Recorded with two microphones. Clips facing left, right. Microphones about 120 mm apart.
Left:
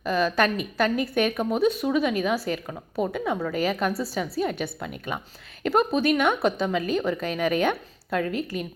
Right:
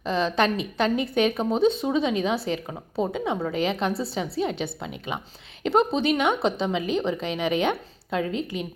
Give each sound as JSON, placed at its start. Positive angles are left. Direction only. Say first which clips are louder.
{"t": 0.0, "sound": "a woman's voice", "louder": "even", "side_deg": -25}